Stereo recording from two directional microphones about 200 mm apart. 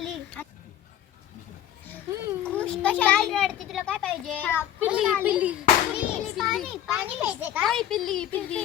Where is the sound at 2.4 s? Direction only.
5° left (ahead or behind).